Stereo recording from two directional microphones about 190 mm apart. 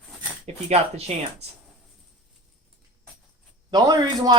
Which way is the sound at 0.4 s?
35° right (ahead or behind).